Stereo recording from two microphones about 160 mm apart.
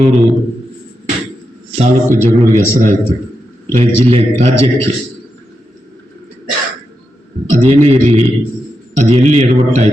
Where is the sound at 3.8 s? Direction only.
35° right (ahead or behind).